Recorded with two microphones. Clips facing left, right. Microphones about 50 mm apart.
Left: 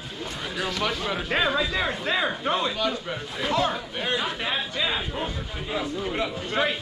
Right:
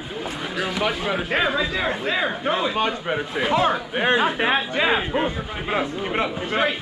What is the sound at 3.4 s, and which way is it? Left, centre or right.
Speech, right.